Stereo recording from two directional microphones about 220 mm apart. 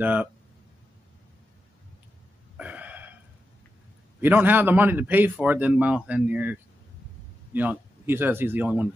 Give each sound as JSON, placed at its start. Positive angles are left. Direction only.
{"t": 0.0, "sound": "a man's voice", "side_deg": -5}
{"t": 2.5, "sound": "gasp", "side_deg": -5}
{"t": 4.2, "sound": "a man's voice", "side_deg": -10}